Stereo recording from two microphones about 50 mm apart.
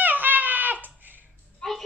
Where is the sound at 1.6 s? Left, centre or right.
Centre.